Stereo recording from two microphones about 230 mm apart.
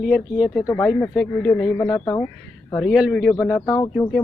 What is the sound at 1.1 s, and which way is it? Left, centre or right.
Speech, centre.